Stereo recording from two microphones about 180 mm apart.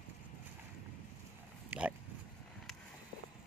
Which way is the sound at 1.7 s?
10° right (ahead or behind).